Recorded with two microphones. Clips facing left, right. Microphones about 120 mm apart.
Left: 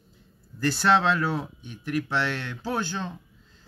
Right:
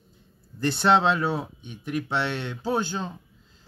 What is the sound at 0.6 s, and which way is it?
Speech, 25° right (ahead or behind).